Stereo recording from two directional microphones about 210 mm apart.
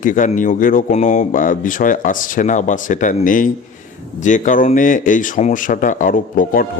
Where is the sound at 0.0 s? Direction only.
35° left (ahead or behind).